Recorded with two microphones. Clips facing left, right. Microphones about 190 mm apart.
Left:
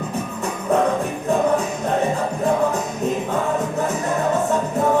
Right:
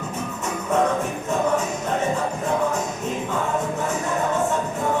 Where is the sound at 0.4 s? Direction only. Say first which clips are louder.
Left 2 dB; 35° left (ahead or behind).